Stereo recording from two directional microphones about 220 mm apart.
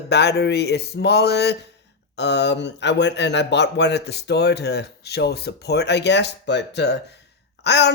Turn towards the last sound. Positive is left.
turn(degrees=50)  # may be behind; listen again after turning